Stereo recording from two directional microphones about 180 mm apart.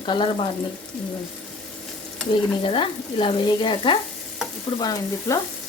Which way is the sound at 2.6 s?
30° left (ahead or behind).